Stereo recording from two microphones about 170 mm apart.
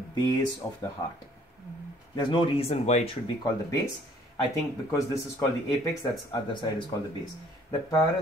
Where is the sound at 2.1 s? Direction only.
30° left (ahead or behind).